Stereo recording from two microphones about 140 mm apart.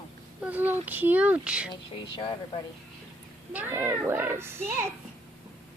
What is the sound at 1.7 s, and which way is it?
Speech, 30° left (ahead or behind).